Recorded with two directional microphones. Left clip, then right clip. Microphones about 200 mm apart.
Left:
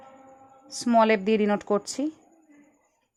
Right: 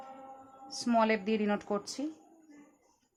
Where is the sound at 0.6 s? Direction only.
40° left (ahead or behind).